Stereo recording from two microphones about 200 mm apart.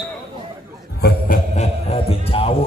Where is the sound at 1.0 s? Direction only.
45° left (ahead or behind).